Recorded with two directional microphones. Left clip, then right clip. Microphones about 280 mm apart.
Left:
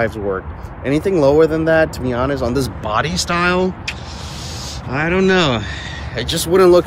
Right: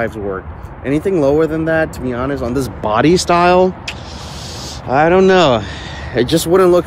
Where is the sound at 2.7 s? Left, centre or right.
Right.